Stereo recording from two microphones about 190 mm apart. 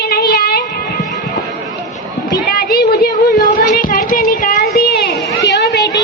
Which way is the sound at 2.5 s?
55° left (ahead or behind).